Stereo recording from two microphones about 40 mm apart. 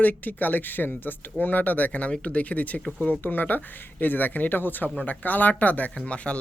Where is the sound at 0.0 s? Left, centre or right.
Left.